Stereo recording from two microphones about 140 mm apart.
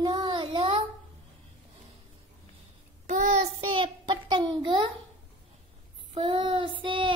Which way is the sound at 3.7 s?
35° right (ahead or behind).